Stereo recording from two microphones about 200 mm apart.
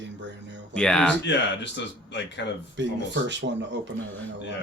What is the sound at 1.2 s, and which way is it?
Speech, 60° left (ahead or behind).